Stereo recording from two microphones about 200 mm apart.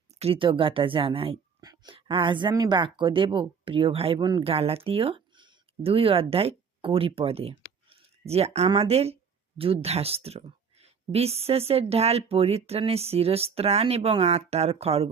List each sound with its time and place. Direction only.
0.2 s a woman's voice: 25° right (ahead or behind)